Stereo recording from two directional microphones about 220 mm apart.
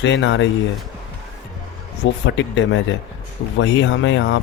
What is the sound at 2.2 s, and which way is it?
Speech, 55° left (ahead or behind).